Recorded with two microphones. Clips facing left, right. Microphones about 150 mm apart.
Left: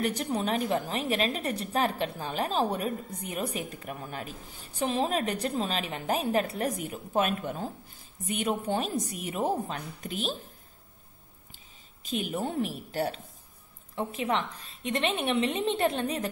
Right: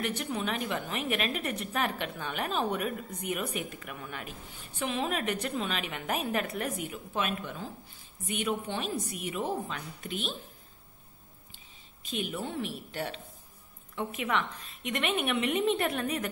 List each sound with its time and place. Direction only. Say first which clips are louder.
0.0 s a woman's voice: left 4 dB; 35° left (ahead or behind)
12.0 s a woman's voice: left 4 dB; 40° left (ahead or behind)